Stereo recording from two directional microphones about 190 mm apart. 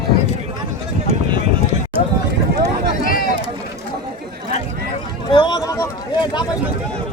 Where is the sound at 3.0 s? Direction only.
50° left (ahead or behind).